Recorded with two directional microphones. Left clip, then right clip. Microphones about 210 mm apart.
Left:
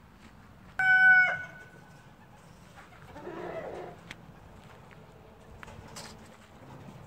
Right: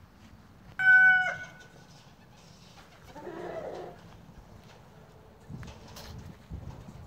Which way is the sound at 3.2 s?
40° right (ahead or behind).